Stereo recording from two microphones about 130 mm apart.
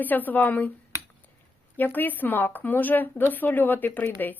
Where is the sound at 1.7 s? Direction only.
15° left (ahead or behind).